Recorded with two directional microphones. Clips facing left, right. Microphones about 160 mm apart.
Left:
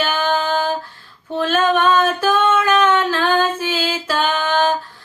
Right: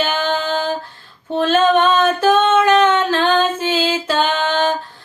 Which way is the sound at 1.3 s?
25° right (ahead or behind).